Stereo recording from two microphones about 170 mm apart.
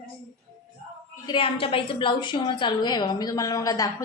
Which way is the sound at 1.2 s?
30° left (ahead or behind).